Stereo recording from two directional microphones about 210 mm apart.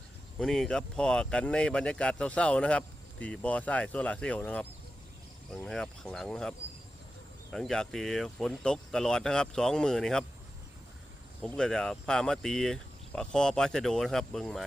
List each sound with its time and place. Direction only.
0.3 s speech: centre (ahead or behind)
5.6 s speech: centre (ahead or behind)
7.5 s speech: centre (ahead or behind)
11.4 s speech: 5° left (ahead or behind)